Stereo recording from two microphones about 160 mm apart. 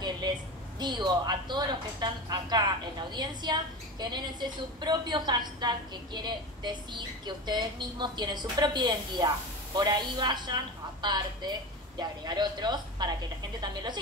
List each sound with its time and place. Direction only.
0.7 s a woman's voice: 25° right (ahead or behind)